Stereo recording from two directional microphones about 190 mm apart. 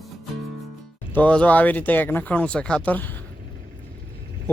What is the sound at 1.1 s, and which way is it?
Speech, 5° left (ahead or behind).